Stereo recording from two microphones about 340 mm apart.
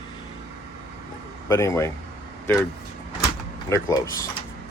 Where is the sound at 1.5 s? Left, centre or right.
Centre.